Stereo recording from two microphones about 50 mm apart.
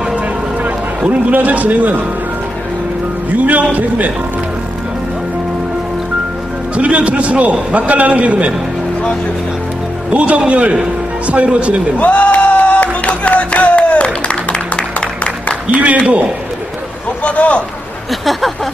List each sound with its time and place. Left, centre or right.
1.3 s a man's voice: right
3.3 s a man's voice: right
6.8 s a man's voice: right
10.1 s a man's voice: right
12.0 s music: left
15.7 s a man's voice: right
17.2 s speech: left